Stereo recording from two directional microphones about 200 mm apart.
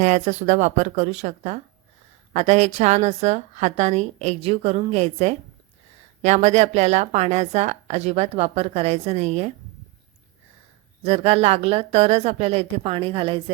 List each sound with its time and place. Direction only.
0.0 s speech: 35° right (ahead or behind)
11.0 s speech: 30° right (ahead or behind)